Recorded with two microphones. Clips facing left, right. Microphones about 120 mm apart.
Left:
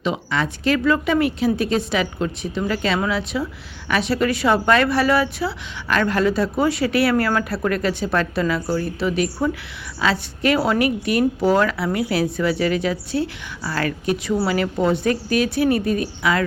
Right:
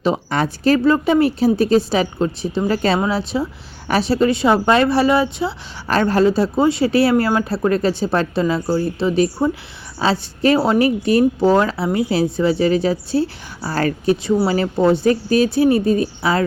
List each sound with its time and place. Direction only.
0.0 s a woman's voice: 40° right (ahead or behind)